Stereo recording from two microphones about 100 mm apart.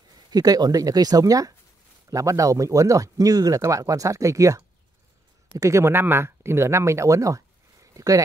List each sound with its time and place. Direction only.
0.3 s speech: 40° right (ahead or behind)